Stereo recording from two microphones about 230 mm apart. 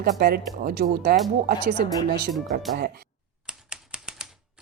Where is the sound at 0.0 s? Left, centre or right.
Right.